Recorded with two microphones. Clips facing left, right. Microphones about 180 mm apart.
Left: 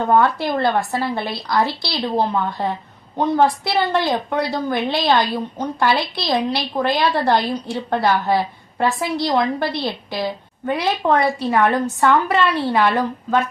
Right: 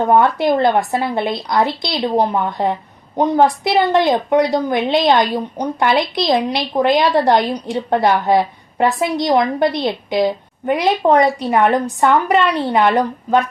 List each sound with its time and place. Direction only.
0.1 s a woman's voice: 20° right (ahead or behind)